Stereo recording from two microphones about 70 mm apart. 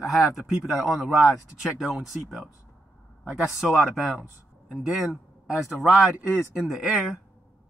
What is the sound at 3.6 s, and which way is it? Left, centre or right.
Speech, centre.